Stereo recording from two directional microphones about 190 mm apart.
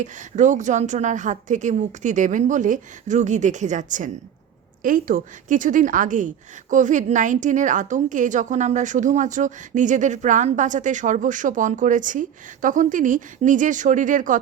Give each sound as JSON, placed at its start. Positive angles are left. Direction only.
{"t": 0.0, "sound": "a woman's voice", "side_deg": -40}